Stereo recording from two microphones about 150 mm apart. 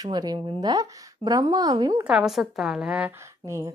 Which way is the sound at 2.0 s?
5° right (ahead or behind).